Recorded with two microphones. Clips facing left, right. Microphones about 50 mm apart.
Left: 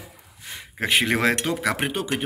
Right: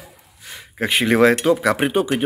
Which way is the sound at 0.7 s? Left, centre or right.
Centre.